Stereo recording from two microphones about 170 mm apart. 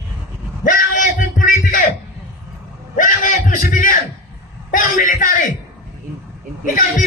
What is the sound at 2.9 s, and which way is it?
A man's voice, 50° left (ahead or behind).